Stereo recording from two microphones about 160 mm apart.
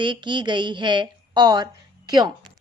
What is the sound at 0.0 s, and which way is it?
A woman's voice, 30° right (ahead or behind).